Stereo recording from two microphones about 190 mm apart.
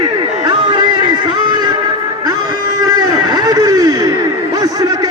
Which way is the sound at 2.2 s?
20° right (ahead or behind).